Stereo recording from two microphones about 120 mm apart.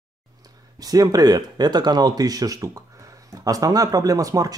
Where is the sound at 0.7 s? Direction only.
30° right (ahead or behind).